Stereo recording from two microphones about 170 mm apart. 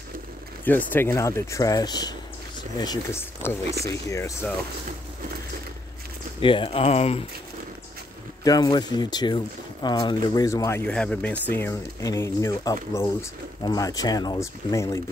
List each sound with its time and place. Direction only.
0.7 s speech: 10° left (ahead or behind)
6.4 s speech: 30° left (ahead or behind)
8.5 s speech: 25° left (ahead or behind)
10.9 s speech: 5° left (ahead or behind)
11.5 s speech: 15° left (ahead or behind)